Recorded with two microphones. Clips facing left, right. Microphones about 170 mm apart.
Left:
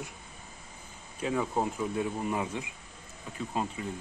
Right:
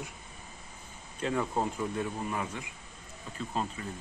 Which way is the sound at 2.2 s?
20° left (ahead or behind).